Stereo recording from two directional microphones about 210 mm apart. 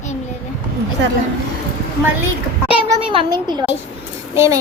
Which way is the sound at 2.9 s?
20° right (ahead or behind).